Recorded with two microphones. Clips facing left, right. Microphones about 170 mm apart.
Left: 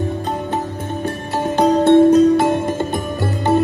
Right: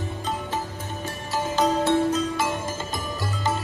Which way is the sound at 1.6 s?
60° left (ahead or behind).